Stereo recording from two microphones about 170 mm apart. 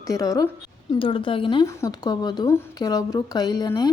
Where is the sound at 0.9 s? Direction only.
30° left (ahead or behind).